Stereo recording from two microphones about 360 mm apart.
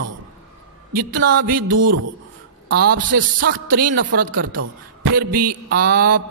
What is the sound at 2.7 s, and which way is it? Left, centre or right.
A man's voice, right.